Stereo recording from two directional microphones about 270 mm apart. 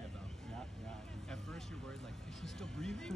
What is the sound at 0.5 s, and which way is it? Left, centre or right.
Vehicle, centre.